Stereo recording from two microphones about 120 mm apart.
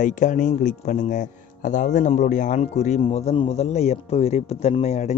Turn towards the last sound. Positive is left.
turn(degrees=65)  # may be behind; listen again after turning